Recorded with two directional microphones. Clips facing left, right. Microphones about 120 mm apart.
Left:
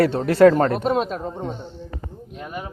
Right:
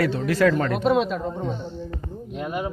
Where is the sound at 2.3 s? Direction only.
15° right (ahead or behind).